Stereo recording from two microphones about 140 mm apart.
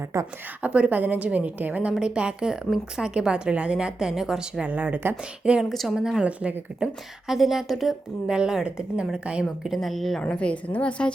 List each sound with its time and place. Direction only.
0.1 s a woman's voice: 20° right (ahead or behind)
0.6 s a woman's voice: 10° right (ahead or behind); by 11.1 s 10° left (ahead or behind)